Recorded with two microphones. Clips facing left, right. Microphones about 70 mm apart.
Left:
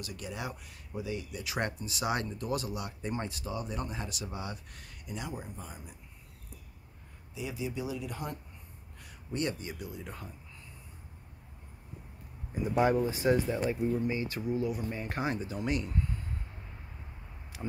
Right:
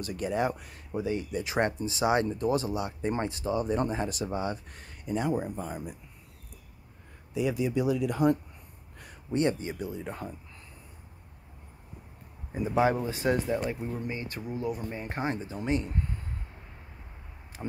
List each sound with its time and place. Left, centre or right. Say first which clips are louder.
0.0 s speech: right 10 dB; right
7.3 s speech: right 9 dB; right
9.3 s speech: right 7 dB; right
12.8 s speech: left 1 dB; right
14.0 s speech: left 3 dB; right
14.9 s speech: right 1 dB; right
17.6 s speech: right 2 dB; right